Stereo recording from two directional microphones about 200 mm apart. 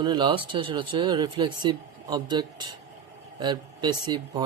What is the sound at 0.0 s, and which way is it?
Speech, 25° right (ahead or behind).